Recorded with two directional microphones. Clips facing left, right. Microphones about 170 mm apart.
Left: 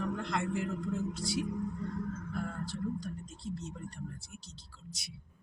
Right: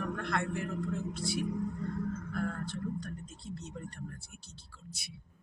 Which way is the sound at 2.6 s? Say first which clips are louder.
Left 1 dB; 60° right (ahead or behind).